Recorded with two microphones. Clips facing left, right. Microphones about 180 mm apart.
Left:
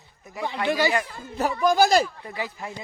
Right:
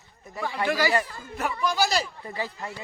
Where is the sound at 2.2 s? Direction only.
5° left (ahead or behind).